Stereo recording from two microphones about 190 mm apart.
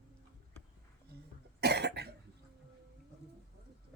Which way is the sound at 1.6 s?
60° right (ahead or behind).